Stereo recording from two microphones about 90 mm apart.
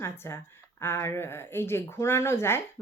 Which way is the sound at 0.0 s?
25° left (ahead or behind).